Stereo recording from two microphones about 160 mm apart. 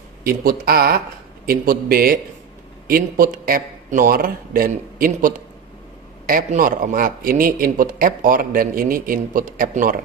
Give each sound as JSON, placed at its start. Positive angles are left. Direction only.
{"t": 0.2, "sound": "speech", "side_deg": -70}